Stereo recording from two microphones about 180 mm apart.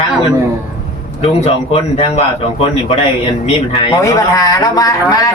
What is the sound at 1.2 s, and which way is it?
A man's voice, 35° left (ahead or behind).